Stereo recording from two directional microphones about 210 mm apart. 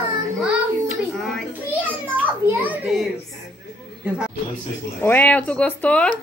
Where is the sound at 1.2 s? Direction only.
5° right (ahead or behind).